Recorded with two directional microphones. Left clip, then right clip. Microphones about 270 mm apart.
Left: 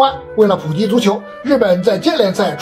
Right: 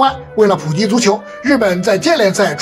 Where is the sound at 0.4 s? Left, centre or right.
Right.